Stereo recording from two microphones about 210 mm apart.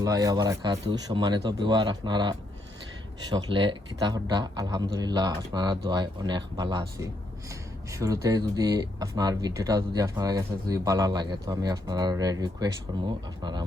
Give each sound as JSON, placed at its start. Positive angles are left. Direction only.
{"t": 0.0, "sound": "speech", "side_deg": -15}
{"t": 7.9, "sound": "speech", "side_deg": -15}